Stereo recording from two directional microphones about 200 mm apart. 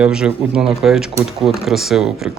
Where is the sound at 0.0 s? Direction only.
5° right (ahead or behind).